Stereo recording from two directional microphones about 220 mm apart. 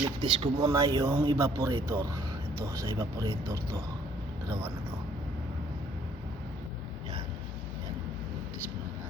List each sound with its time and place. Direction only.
0.0 s speech: 20° right (ahead or behind)